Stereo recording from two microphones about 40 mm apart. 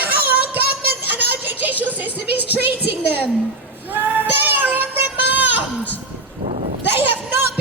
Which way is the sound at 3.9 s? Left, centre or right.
Right.